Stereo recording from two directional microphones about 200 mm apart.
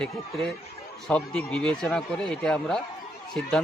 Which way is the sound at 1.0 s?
5° left (ahead or behind).